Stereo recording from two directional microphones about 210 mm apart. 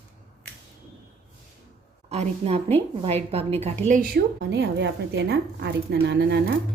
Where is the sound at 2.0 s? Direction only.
30° right (ahead or behind).